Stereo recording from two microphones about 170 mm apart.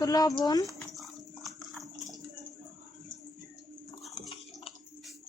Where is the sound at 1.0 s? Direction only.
Centre (ahead or behind).